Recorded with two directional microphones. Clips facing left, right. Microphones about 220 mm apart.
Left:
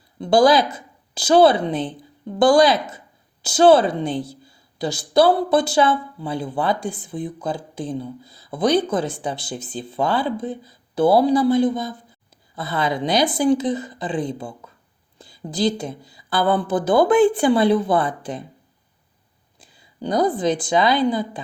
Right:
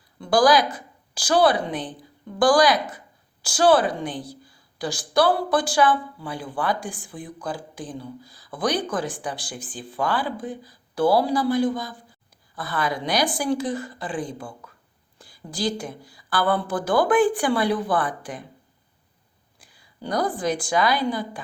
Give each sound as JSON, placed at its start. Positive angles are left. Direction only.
{"t": 0.2, "sound": "a woman's voice", "side_deg": 25}
{"t": 19.5, "sound": "a woman's voice", "side_deg": 25}